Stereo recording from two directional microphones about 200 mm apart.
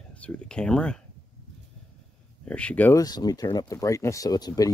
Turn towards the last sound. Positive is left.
turn(degrees=20)  # may be behind; listen again after turning